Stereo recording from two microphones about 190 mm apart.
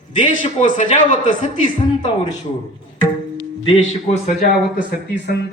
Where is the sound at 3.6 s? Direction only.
30° left (ahead or behind).